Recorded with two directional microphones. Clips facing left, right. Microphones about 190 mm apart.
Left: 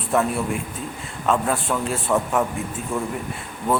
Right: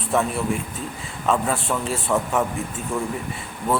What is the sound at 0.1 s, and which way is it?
A man's voice, centre (ahead or behind).